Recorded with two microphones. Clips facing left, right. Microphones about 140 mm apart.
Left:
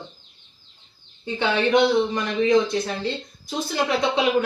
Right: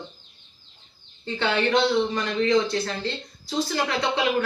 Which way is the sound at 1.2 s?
15° left (ahead or behind).